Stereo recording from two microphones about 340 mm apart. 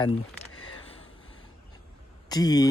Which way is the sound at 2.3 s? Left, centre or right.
Centre.